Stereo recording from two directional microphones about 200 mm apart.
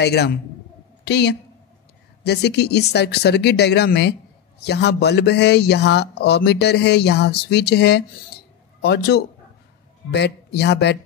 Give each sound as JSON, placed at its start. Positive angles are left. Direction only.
{"t": 0.0, "sound": "a man's voice", "side_deg": 55}